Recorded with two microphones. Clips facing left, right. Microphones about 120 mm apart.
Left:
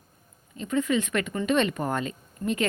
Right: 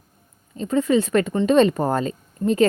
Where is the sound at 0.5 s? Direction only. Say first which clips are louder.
Right 6 dB; 35° right (ahead or behind).